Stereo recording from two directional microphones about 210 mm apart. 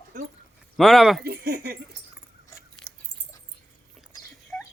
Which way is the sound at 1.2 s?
50° right (ahead or behind).